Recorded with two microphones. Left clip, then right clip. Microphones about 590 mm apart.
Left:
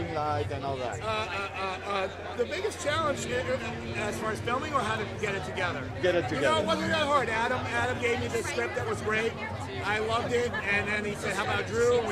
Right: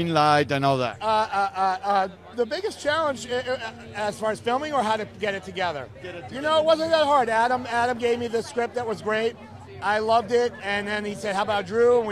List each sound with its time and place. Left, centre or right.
0.1 s speech: centre
1.0 s speech: right